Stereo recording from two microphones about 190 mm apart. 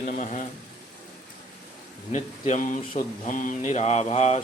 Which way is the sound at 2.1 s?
40° left (ahead or behind).